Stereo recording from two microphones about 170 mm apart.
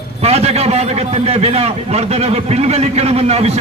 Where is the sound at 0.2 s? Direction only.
40° right (ahead or behind).